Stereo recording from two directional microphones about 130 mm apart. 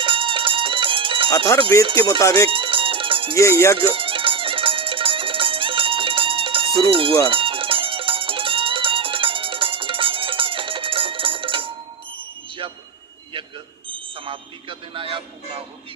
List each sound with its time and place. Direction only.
0.0 s music: 40° right (ahead or behind)
1.8 s speech: 40° right (ahead or behind)
2.0 s speech: 30° left (ahead or behind)
2.3 s music: 40° right (ahead or behind)
14.3 s a sound: 40° right (ahead or behind)